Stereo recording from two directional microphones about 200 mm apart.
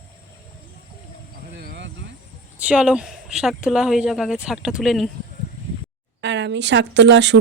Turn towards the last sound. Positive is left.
turn(degrees=-60)  # may be behind; listen again after turning